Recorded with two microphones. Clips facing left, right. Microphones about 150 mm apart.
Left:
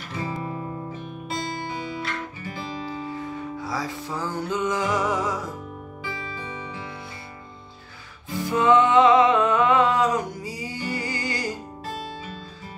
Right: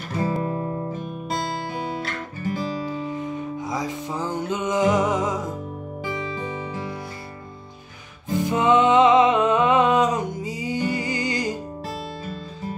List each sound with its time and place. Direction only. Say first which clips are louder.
0.1 s music: right 6 dB; 45° right (ahead or behind)
3.1 s music: right 3 dB; 20° right (ahead or behind)
8.3 s music: even; 20° right (ahead or behind)